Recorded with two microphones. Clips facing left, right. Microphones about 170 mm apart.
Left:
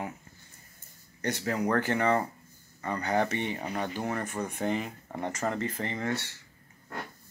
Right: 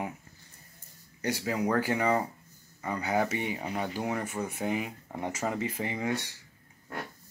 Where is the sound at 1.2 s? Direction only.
10° right (ahead or behind).